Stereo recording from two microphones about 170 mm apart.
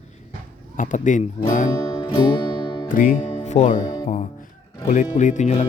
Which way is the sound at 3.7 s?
25° left (ahead or behind).